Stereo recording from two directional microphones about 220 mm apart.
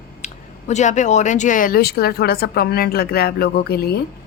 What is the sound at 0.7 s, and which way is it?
Speech, 35° left (ahead or behind).